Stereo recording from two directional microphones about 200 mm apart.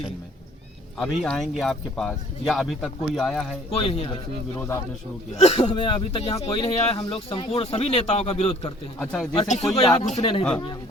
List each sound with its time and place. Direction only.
0.9 s speech: centre (ahead or behind)
3.7 s speech: 25° left (ahead or behind)
5.4 s speech: 30° left (ahead or behind)
9.0 s speech: centre (ahead or behind)
9.7 s speech: 30° left (ahead or behind)